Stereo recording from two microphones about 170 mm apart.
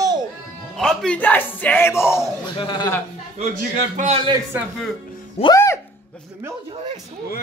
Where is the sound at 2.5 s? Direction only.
25° left (ahead or behind).